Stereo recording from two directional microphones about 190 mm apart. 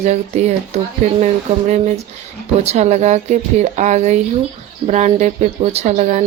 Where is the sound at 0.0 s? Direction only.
35° right (ahead or behind).